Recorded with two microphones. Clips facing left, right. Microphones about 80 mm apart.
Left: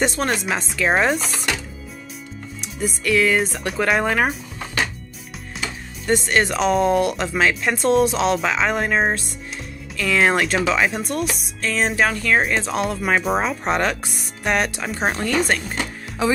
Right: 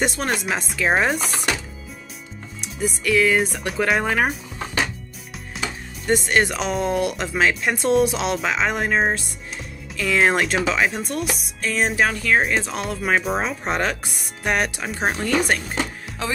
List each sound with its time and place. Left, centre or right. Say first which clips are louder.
0.0 s speech: left 2 dB; centre
2.6 s speech: even; centre
6.0 s speech: even; centre